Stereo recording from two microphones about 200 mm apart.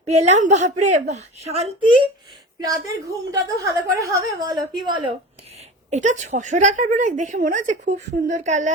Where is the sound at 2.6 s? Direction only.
15° right (ahead or behind).